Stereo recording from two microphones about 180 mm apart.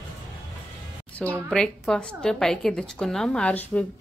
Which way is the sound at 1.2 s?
5° left (ahead or behind).